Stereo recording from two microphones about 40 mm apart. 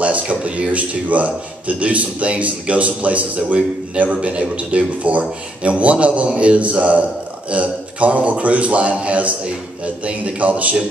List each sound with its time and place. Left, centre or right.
0.0 s a man's voice: right